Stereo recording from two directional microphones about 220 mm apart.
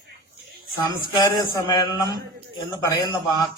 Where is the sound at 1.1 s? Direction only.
15° left (ahead or behind).